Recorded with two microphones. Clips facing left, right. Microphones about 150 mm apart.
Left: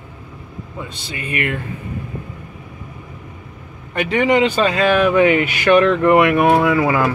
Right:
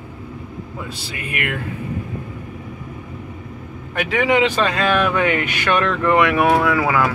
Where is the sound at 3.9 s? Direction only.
5° right (ahead or behind).